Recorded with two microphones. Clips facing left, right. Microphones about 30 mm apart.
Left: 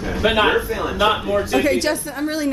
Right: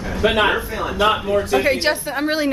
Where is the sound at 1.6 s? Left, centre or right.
Right.